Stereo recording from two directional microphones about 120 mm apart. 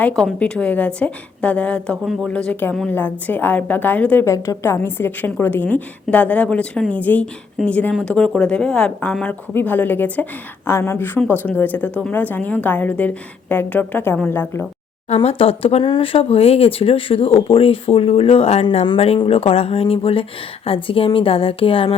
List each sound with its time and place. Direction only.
0.3 s a woman's voice: 10° left (ahead or behind)
15.1 s speech: 60° left (ahead or behind)